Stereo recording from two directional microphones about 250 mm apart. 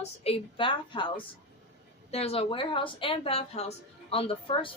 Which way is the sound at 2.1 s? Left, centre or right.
Left.